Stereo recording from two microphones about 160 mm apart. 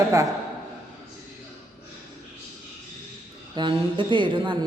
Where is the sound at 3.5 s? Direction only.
30° right (ahead or behind).